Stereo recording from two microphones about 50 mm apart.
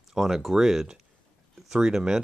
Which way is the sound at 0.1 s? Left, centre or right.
Centre.